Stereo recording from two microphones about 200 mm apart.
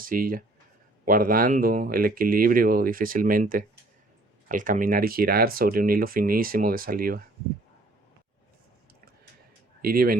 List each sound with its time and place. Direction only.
0.0 s speech: 45° right (ahead or behind)
9.8 s speech: 50° right (ahead or behind)